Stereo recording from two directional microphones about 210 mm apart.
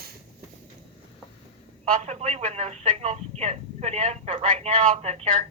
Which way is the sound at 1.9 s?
30° right (ahead or behind).